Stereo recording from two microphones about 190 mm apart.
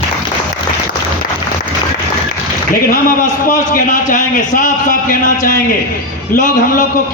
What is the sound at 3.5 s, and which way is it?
A man's voice, 45° left (ahead or behind).